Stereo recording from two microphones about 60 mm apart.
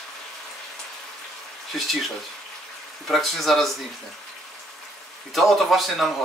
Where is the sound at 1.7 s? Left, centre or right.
Centre.